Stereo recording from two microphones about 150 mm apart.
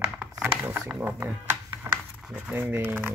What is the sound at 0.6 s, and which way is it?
Speech, 15° right (ahead or behind).